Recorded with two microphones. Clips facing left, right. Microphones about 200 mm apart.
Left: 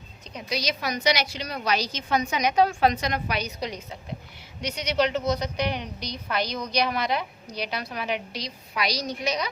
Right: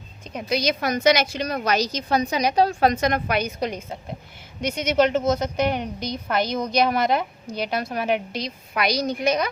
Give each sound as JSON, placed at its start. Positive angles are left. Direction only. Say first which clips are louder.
{"t": 0.3, "sound": "a woman's voice", "louder": "right 6 dB", "side_deg": -50}